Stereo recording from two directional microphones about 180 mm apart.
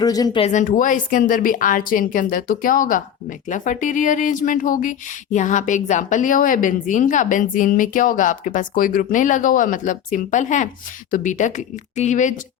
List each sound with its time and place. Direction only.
0.0 s speech: 20° left (ahead or behind)
0.4 s speech: 45° left (ahead or behind)